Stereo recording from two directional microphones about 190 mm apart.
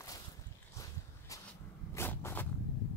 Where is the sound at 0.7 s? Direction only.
15° left (ahead or behind).